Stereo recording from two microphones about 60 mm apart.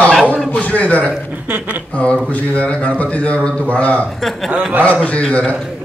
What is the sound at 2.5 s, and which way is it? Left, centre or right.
A man's voice, left.